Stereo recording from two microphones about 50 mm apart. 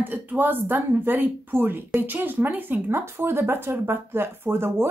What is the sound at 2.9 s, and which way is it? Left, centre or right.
Speech, right.